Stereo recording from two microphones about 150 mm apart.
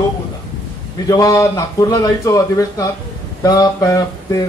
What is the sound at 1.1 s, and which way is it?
A man's voice, 20° left (ahead or behind).